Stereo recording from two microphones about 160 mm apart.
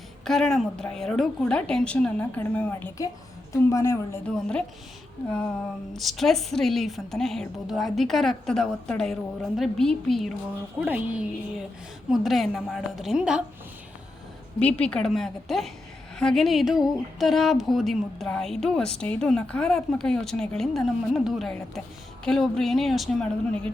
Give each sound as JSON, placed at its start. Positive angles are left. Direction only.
{"t": 0.3, "sound": "a woman's voice", "side_deg": 5}
{"t": 4.3, "sound": "a woman's voice", "side_deg": 5}
{"t": 6.0, "sound": "a woman's voice", "side_deg": 0}
{"t": 10.8, "sound": "a woman's voice", "side_deg": -10}
{"t": 14.6, "sound": "a woman's voice", "side_deg": 10}